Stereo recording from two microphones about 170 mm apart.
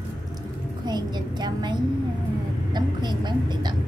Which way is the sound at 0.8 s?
25° right (ahead or behind).